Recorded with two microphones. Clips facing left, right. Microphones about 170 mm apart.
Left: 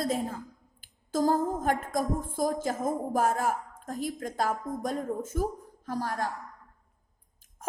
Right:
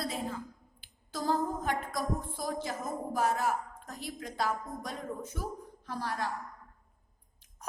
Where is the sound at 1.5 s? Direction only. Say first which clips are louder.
Left 5 dB; 45° left (ahead or behind).